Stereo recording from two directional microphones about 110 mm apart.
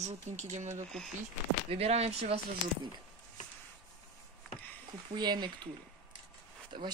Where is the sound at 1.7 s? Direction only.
70° right (ahead or behind).